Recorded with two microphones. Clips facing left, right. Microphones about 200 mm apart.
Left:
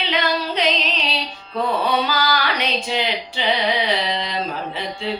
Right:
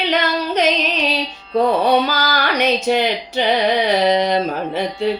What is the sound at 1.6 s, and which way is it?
Music, 45° right (ahead or behind).